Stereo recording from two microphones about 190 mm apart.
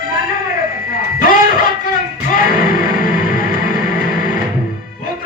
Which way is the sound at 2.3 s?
45° left (ahead or behind).